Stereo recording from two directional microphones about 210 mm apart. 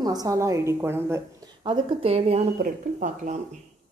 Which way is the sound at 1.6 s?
25° right (ahead or behind).